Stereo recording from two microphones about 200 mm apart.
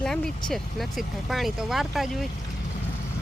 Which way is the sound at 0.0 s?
5° left (ahead or behind).